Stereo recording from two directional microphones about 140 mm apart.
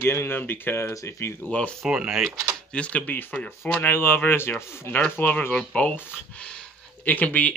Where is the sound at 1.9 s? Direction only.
5° right (ahead or behind).